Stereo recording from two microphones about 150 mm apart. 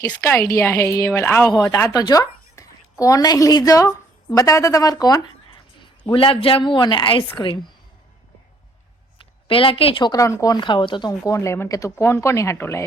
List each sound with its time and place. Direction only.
0.1 s a woman's voice: 15° left (ahead or behind)
5.5 s a sound: 30° left (ahead or behind)
6.1 s speech: 35° left (ahead or behind)
9.5 s speech: 35° left (ahead or behind)
11.3 s a woman's voice: 15° left (ahead or behind)